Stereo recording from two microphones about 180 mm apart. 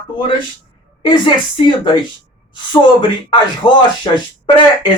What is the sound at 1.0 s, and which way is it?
Speech, 25° left (ahead or behind).